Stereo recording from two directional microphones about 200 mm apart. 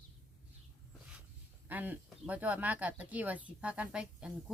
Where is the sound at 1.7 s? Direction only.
10° right (ahead or behind).